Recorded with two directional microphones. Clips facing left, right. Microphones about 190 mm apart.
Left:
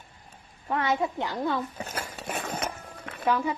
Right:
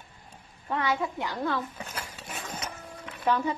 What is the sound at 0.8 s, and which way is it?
Speech, 20° left (ahead or behind).